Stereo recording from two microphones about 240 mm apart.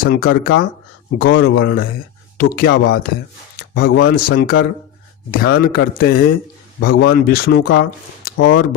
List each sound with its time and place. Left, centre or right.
0.0 s speech: left
3.6 s a sound: left
4.1 s speech: left
6.7 s speech: left
7.1 s speech: left